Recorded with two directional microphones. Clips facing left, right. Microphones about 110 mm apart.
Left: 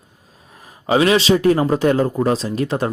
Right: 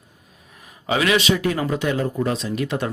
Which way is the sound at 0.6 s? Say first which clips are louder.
Left 6 dB; 35° left (ahead or behind).